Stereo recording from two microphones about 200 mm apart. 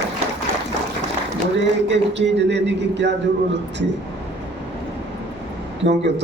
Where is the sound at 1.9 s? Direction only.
60° right (ahead or behind).